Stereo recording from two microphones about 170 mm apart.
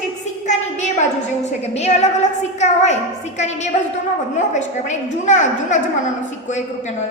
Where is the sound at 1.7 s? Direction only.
40° left (ahead or behind).